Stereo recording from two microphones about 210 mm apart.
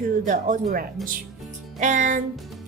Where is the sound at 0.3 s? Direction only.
35° right (ahead or behind).